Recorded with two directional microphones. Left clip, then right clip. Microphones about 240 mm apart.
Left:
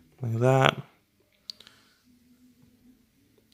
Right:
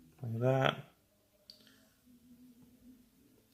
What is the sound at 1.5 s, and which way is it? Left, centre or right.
Clicking, left.